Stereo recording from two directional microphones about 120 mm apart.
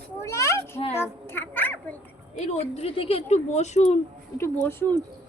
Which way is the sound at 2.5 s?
60° left (ahead or behind).